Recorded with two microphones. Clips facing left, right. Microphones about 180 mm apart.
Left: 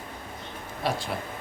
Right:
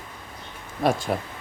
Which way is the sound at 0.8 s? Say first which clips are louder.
Right 7 dB; 50° right (ahead or behind).